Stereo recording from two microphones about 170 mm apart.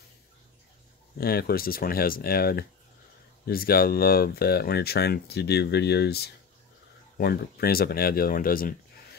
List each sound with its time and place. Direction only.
1.1 s speech: 60° left (ahead or behind)